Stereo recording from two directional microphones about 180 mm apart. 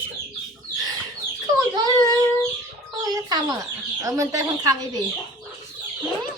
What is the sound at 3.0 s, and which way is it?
Chicken, 20° right (ahead or behind).